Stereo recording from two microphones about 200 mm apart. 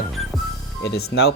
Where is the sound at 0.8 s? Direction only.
55° left (ahead or behind).